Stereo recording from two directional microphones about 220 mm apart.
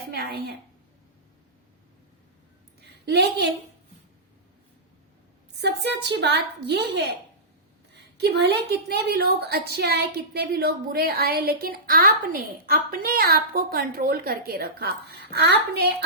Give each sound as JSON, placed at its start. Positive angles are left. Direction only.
{"t": 0.1, "sound": "a woman's voice", "side_deg": -45}
{"t": 2.8, "sound": "a woman's voice", "side_deg": -50}
{"t": 5.5, "sound": "a woman's voice", "side_deg": -50}